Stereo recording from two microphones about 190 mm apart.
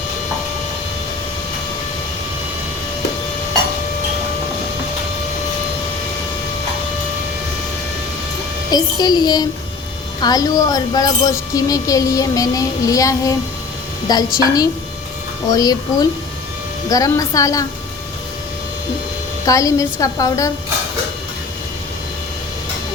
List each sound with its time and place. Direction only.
8.7 s a child's voice: 20° left (ahead or behind)
19.5 s speech: 15° left (ahead or behind)